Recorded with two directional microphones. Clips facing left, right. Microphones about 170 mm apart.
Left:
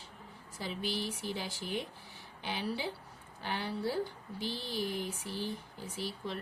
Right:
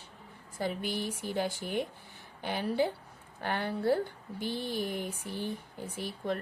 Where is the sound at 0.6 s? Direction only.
50° right (ahead or behind).